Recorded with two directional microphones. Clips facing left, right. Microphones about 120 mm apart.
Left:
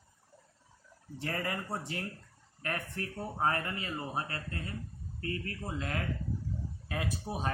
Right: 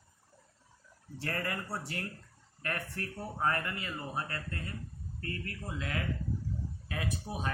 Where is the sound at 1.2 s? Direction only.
20° left (ahead or behind).